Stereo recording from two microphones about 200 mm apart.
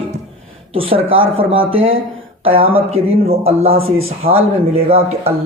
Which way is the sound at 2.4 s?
30° right (ahead or behind).